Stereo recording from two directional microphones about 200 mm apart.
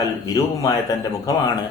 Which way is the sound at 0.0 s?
15° left (ahead or behind).